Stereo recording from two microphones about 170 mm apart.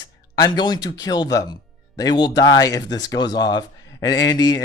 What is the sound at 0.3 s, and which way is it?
Speech, 25° left (ahead or behind).